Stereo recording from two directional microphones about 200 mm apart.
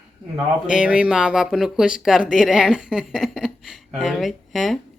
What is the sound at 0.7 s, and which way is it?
Speech, 5° right (ahead or behind).